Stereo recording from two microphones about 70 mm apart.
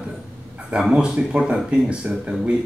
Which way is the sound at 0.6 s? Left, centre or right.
Centre.